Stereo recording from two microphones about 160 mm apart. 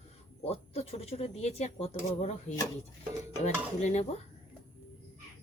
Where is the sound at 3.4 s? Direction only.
45° left (ahead or behind).